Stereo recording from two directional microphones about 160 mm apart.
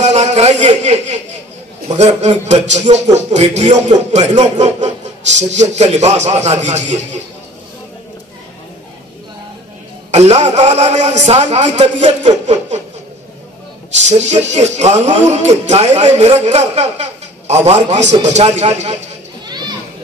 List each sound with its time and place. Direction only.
0.0 s speech: 45° right (ahead or behind)
10.1 s speech: 45° right (ahead or behind)
14.0 s a man's voice: 45° right (ahead or behind)